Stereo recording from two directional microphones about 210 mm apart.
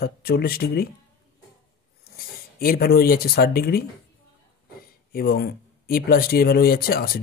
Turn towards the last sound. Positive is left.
turn(degrees=45)  # may be behind; listen again after turning